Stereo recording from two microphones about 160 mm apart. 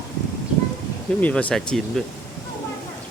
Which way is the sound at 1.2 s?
10° left (ahead or behind).